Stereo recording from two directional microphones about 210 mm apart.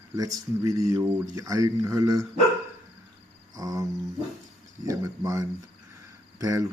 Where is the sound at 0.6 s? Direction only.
15° right (ahead or behind).